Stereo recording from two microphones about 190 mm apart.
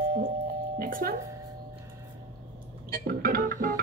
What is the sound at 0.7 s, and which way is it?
Speech, 50° right (ahead or behind).